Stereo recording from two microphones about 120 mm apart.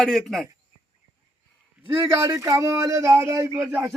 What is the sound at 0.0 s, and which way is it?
Speech, 5° left (ahead or behind).